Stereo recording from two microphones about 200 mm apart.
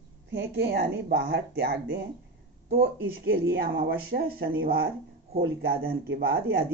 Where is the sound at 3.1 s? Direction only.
50° right (ahead or behind).